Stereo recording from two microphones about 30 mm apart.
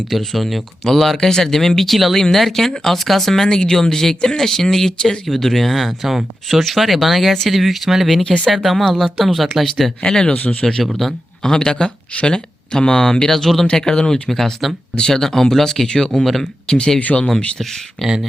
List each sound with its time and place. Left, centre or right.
0.2 s speech: centre
3.4 s speech: left; by 9.9 s centre
10.1 s speech: left
10.3 s speech: left
11.0 s speech: centre
11.4 s speech: left
13.7 s speech: left
14.3 s speech: centre
16.1 s speech: centre
16.7 s speech: left
17.1 s speech: centre